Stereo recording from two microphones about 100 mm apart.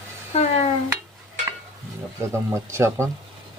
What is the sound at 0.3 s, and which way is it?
Stir, 90° left.